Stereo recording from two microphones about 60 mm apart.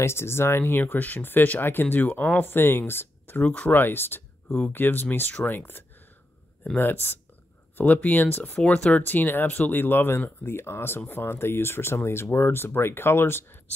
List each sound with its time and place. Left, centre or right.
0.0 s speech: left
8.5 s speech: centre
9.0 s speech: left